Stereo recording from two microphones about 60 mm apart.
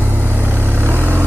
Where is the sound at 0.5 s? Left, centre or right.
Right.